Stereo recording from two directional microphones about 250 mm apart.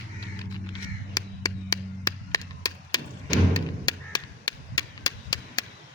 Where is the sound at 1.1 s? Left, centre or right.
Centre.